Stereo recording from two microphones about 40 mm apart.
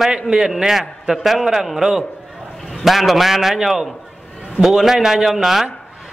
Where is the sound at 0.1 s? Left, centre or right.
Centre.